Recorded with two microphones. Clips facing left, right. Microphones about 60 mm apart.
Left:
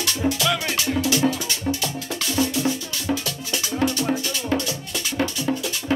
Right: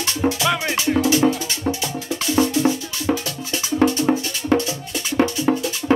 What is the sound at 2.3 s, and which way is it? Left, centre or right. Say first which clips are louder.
Music: right 5 dB; right.